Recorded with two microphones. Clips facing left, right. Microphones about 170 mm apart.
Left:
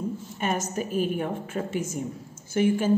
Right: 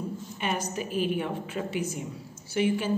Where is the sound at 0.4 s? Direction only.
45° left (ahead or behind).